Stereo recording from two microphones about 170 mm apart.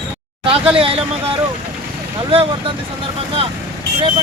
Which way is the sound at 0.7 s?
35° right (ahead or behind).